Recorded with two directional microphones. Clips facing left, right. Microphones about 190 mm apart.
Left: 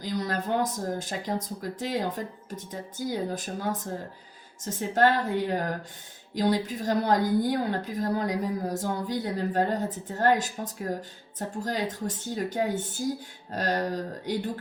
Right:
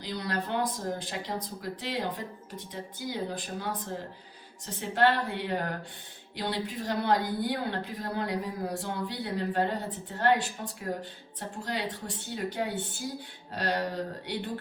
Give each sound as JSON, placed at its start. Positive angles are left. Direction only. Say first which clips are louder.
{"t": 0.0, "sound": "a woman's voice", "louder": "left 3 dB", "side_deg": 45}